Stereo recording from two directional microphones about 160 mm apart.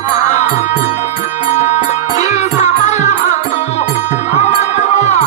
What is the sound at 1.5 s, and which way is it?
Music, 45° left (ahead or behind).